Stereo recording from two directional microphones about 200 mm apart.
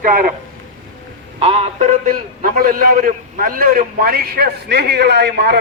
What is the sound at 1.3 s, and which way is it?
A man's voice, 30° right (ahead or behind).